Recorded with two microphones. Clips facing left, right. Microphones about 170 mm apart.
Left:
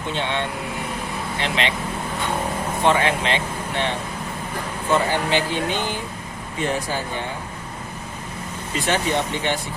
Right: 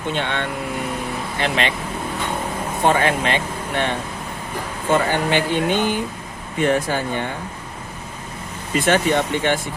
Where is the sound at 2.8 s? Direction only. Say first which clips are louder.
Right 2 dB; 45° right (ahead or behind).